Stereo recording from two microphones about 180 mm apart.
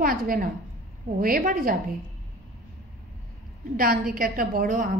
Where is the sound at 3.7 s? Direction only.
55° right (ahead or behind).